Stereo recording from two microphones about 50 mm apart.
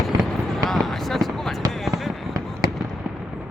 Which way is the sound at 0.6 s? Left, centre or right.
Centre.